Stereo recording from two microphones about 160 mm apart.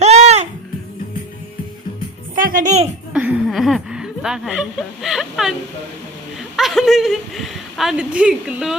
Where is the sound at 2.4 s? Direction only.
60° right (ahead or behind).